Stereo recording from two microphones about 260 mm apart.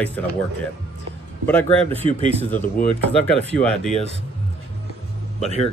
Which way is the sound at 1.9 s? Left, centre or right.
Right.